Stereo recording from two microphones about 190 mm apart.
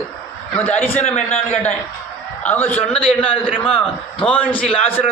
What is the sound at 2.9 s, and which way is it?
Speech, 30° left (ahead or behind).